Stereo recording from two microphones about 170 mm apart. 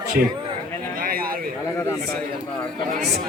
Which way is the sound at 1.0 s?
60° right (ahead or behind).